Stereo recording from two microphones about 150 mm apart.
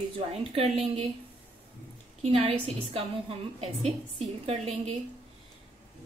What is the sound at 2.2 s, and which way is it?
A woman's voice, 40° right (ahead or behind).